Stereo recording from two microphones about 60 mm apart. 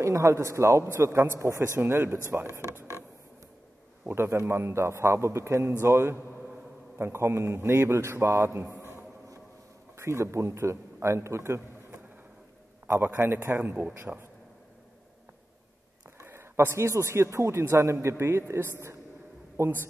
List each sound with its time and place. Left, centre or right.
0.0 s a man's voice: right
1.8 s a man's voice: right
2.3 s music: right
4.1 s a man's voice: right
9.9 s a man's voice: right
16.2 s a man's voice: right